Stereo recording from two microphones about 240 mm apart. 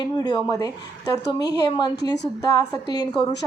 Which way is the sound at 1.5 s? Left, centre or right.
Centre.